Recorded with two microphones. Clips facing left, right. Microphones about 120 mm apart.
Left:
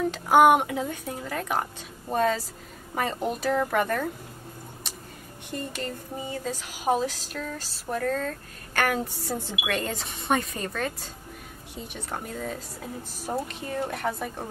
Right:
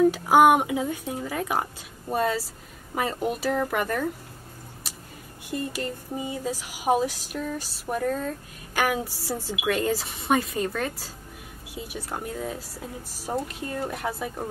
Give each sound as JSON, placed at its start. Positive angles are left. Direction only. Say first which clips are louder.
{"t": 0.0, "sound": "speech", "louder": "right 2 dB", "side_deg": -10}
{"t": 5.5, "sound": "speech", "louder": "right 3 dB", "side_deg": -5}